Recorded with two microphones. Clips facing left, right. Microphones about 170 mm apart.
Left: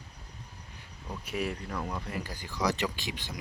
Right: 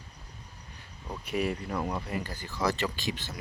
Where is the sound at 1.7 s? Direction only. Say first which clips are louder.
Right 4 dB; 25° right (ahead or behind).